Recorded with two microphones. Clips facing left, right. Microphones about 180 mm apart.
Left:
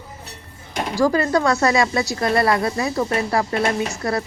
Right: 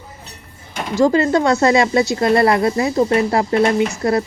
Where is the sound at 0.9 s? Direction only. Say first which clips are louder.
Right 4 dB; 25° right (ahead or behind).